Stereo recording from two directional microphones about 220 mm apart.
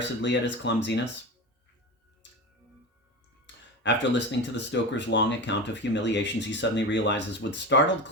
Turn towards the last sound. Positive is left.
turn(degrees=55)  # may be behind; listen again after turning